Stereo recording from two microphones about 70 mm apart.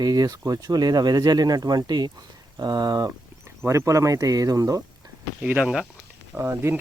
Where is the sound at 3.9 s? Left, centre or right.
Right.